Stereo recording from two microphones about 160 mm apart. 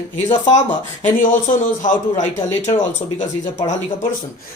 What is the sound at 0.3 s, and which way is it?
Speech, 25° left (ahead or behind).